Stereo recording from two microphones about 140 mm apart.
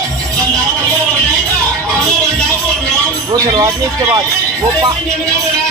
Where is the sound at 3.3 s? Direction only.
25° right (ahead or behind).